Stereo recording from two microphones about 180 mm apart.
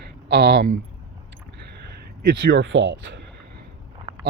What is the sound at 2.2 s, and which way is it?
Speech, 60° right (ahead or behind).